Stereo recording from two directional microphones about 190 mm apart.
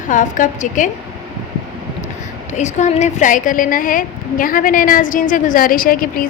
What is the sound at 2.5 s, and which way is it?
A woman's voice, 40° left (ahead or behind).